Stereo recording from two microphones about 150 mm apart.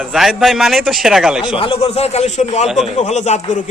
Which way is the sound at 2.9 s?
50° left (ahead or behind).